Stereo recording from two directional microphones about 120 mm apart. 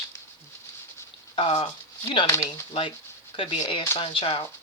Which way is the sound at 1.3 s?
50° left (ahead or behind).